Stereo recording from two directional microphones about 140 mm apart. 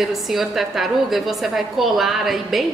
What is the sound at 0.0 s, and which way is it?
A woman's voice, centre (ahead or behind).